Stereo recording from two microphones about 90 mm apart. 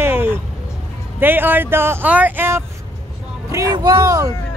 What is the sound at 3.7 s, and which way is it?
Speech, 50° right (ahead or behind).